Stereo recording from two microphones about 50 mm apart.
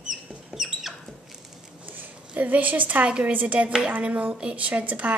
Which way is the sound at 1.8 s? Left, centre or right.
Right.